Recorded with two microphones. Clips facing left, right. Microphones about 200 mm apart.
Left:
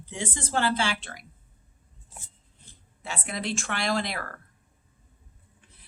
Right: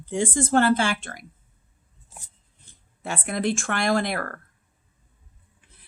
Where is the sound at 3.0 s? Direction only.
50° right (ahead or behind).